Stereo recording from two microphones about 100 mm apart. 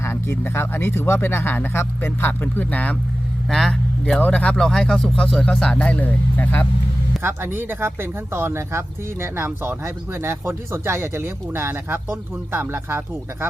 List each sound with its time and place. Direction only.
0.0 s speech: 25° left (ahead or behind)
7.2 s speech: 20° right (ahead or behind)